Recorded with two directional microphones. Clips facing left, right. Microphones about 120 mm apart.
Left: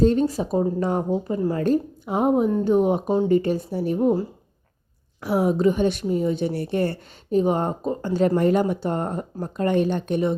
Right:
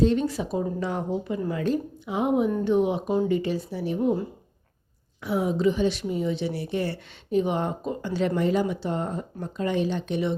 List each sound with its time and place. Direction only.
0.0 s speech: 40° left (ahead or behind)
1.6 s speech: 45° left (ahead or behind)
5.2 s speech: 60° left (ahead or behind)
6.1 s speech: 40° left (ahead or behind)